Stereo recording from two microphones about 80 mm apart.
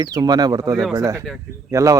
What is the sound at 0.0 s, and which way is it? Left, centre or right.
Speech, right.